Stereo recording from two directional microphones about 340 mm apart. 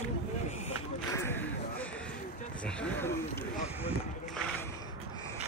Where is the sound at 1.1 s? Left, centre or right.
Centre.